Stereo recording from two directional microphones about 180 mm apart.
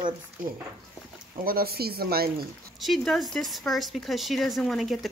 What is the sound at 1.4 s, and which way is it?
Speech, 55° right (ahead or behind).